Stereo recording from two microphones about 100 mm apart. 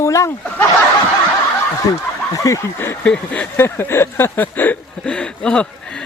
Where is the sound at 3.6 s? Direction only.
25° left (ahead or behind).